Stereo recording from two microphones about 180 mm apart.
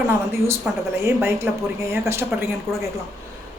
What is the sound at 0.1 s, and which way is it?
Speech, 15° right (ahead or behind).